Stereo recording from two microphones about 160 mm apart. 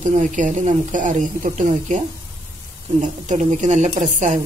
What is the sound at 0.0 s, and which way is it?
Speech, 50° right (ahead or behind).